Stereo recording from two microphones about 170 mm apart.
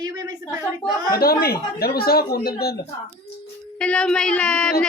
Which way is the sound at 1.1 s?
60° left (ahead or behind).